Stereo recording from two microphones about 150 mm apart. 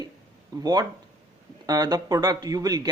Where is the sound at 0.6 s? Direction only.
25° right (ahead or behind).